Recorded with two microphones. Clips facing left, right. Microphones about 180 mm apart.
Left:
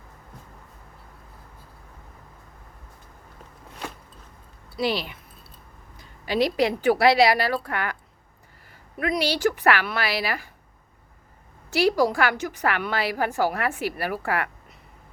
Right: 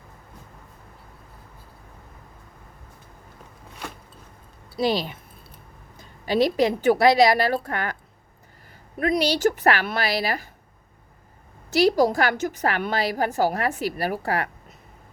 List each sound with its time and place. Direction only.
4.8 s a woman's voice: 40° right (ahead or behind)
6.2 s a woman's voice: 45° right (ahead or behind)
9.1 s a woman's voice: 40° right (ahead or behind)
11.7 s a woman's voice: 40° right (ahead or behind)